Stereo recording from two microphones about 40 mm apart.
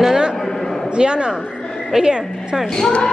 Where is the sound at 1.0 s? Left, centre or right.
Right.